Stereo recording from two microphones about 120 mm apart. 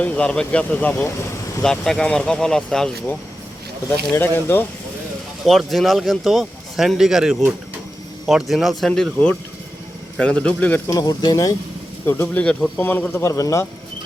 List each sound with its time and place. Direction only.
0.0 s speech: 10° left (ahead or behind)
1.6 s speech: 5° left (ahead or behind)
4.1 s speech: 20° left (ahead or behind)
5.5 s speech: centre (ahead or behind)
10.9 s speech: 30° left (ahead or behind)
12.0 s speech: 20° left (ahead or behind)
12.4 s speech: 5° left (ahead or behind)
12.8 s speech: 15° left (ahead or behind)
13.2 s speech: 25° left (ahead or behind)